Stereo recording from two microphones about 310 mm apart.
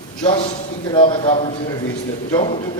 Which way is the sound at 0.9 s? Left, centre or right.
Centre.